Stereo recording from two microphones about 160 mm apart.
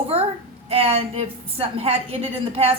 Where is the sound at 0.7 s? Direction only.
35° right (ahead or behind).